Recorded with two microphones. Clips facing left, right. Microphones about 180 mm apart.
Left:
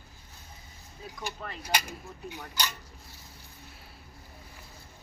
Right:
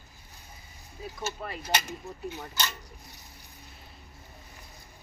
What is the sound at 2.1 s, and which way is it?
Speech, 20° right (ahead or behind).